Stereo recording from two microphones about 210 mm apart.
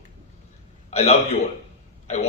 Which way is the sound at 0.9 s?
30° left (ahead or behind).